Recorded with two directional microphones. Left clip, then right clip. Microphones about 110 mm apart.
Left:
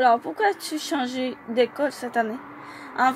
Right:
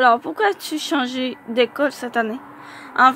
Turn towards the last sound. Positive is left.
turn(degrees=-40)  # may be behind; listen again after turning